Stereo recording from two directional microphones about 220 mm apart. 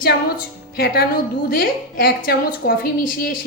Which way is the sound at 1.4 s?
40° left (ahead or behind).